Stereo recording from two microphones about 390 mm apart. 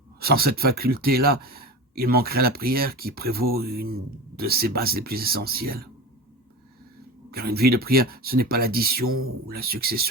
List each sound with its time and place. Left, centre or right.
0.2 s speech: right
7.3 s speech: right